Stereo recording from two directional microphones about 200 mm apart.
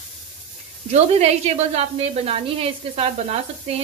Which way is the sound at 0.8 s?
30° right (ahead or behind).